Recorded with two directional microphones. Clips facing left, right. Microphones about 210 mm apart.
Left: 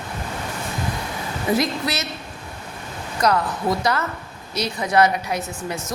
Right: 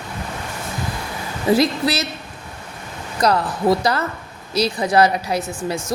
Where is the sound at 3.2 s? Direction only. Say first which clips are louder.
Right 2 dB; 35° right (ahead or behind).